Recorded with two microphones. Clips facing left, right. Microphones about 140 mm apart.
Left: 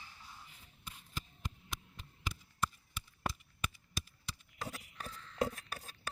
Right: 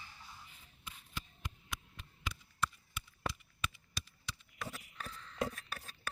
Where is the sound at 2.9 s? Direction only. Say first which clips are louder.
Left 1 dB; 45° left (ahead or behind).